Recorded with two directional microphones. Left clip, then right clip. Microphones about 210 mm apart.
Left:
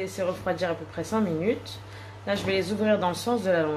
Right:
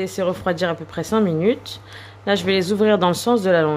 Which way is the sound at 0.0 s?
50° right (ahead or behind).